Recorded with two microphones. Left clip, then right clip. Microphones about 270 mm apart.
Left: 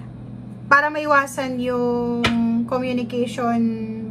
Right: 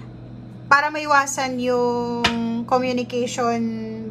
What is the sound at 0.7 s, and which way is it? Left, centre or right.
A woman's voice, centre.